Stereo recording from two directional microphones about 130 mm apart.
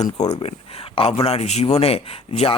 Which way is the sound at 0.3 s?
50° left (ahead or behind).